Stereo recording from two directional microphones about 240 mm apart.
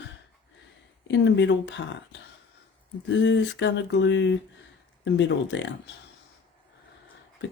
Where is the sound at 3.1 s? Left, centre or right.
Left.